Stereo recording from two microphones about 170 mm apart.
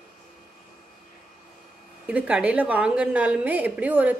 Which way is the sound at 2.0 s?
5° right (ahead or behind).